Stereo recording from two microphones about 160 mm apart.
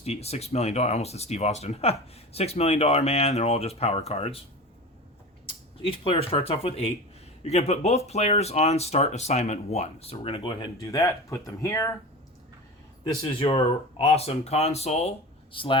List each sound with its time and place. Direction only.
0.0 s speech: 40° left (ahead or behind)
5.8 s speech: 35° left (ahead or behind)
10.8 s speech: 20° left (ahead or behind)
13.4 s speech: 30° left (ahead or behind)
14.0 s speech: 40° left (ahead or behind)